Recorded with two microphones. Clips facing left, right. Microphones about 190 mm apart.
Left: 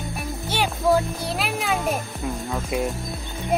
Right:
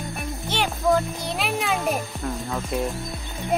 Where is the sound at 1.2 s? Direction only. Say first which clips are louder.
Even; centre (ahead or behind).